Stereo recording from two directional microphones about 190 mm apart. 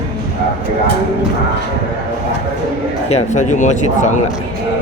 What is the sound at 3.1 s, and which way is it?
Speech, 35° left (ahead or behind).